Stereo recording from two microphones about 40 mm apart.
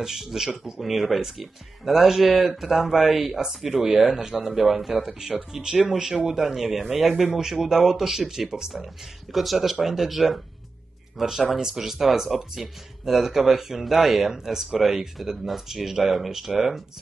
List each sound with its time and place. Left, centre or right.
0.0 s speech: centre
9.3 s speech: centre